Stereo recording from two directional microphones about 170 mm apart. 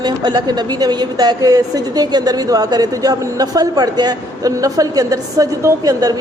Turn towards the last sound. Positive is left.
turn(degrees=-20)  # may be behind; listen again after turning